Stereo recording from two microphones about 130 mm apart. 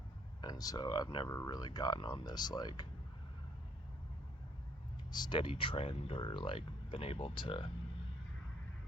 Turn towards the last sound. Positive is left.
turn(degrees=40)  # may be behind; listen again after turning